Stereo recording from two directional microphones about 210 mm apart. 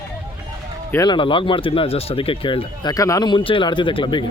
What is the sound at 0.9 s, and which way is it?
Speech, 20° left (ahead or behind).